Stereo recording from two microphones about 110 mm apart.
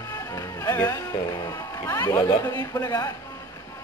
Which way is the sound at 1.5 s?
25° left (ahead or behind).